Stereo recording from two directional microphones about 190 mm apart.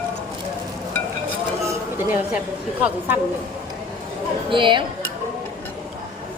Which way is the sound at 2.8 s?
10° right (ahead or behind).